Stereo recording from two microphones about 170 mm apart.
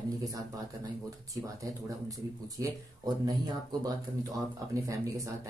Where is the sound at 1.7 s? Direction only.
20° right (ahead or behind).